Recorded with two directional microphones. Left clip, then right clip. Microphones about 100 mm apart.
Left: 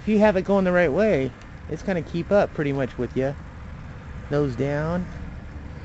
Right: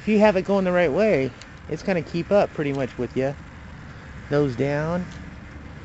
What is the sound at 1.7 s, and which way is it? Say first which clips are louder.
Speech: right 2 dB; 35° right (ahead or behind).